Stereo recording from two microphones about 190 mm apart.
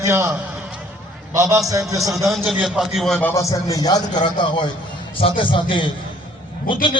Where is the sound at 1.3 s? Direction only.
15° right (ahead or behind).